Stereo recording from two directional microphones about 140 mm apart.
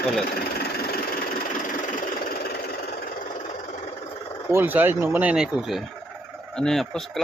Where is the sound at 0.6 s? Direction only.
90° left.